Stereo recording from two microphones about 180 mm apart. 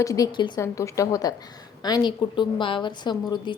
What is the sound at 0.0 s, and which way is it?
A woman's voice, 20° left (ahead or behind).